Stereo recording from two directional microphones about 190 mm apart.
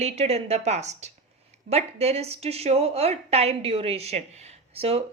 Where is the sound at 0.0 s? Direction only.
35° right (ahead or behind).